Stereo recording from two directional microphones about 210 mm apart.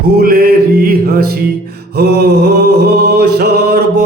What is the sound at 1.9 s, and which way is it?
Mantra, 50° right (ahead or behind).